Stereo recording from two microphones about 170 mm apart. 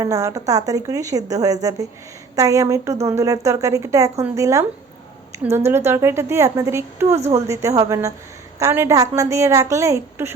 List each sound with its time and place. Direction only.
0.0 s a woman's voice: 20° right (ahead or behind)